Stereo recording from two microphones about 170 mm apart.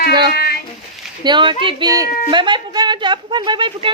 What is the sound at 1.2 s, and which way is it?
Speech, 30° right (ahead or behind).